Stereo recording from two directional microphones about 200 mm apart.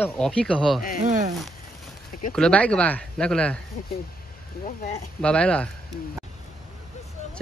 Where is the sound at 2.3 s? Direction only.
5° left (ahead or behind).